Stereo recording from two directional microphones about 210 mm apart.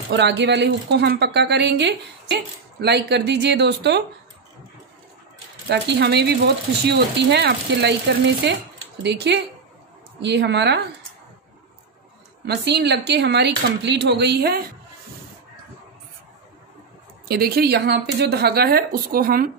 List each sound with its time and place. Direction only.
0.1 s speech: 55° right (ahead or behind)
5.7 s a woman's voice: 50° right (ahead or behind)
12.4 s speech: 50° right (ahead or behind)
17.3 s speech: 45° right (ahead or behind)